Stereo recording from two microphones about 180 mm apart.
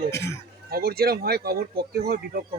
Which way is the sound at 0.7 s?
60° right (ahead or behind).